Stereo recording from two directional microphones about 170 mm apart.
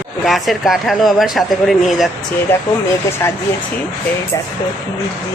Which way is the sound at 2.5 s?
15° left (ahead or behind).